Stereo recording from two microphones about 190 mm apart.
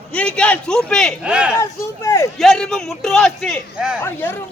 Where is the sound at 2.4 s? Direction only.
Centre (ahead or behind).